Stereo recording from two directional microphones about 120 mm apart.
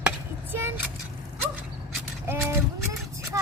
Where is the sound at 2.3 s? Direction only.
25° right (ahead or behind).